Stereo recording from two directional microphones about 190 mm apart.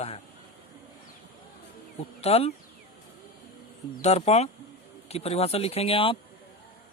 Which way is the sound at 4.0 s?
35° left (ahead or behind).